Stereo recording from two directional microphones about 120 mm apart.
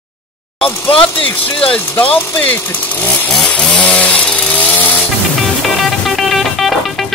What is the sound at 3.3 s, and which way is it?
Chainsaw, 5° left (ahead or behind).